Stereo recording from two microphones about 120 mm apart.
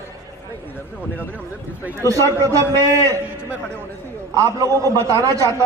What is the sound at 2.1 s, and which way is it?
A man's voice, 25° right (ahead or behind).